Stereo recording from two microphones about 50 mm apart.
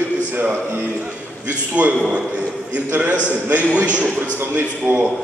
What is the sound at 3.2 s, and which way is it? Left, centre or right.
Speech, left.